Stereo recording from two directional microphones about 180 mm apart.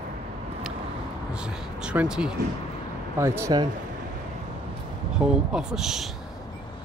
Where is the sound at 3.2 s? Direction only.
15° right (ahead or behind).